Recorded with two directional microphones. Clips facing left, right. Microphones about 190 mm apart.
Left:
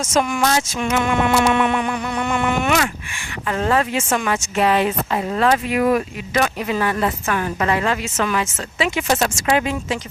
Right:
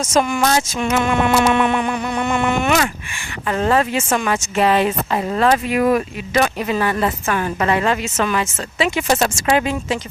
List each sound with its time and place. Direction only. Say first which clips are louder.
0.1 s a woman's voice: right 2 dB; 35° right (ahead or behind)